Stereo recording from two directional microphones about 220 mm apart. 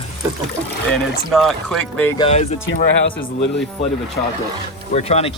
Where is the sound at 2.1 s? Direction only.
25° left (ahead or behind).